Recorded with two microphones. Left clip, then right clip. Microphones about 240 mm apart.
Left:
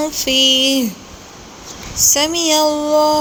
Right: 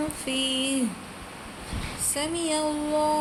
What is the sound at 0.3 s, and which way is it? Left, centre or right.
Music, left.